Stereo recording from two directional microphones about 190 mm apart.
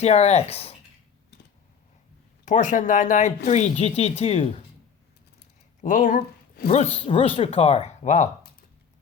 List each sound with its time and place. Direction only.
0.0 s speech: 35° left (ahead or behind)
2.4 s speech: 40° left (ahead or behind)
5.8 s speech: 45° left (ahead or behind)